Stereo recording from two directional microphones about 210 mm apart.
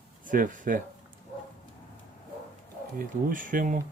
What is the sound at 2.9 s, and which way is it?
Speech, 40° right (ahead or behind).